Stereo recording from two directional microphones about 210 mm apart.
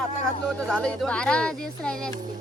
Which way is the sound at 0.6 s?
5° left (ahead or behind).